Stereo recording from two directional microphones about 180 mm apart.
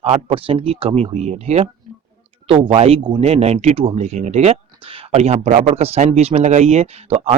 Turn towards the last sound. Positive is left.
turn(degrees=-35)  # may be behind; listen again after turning